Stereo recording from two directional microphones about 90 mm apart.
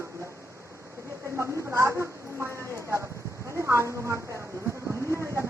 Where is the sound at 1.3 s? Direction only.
30° right (ahead or behind).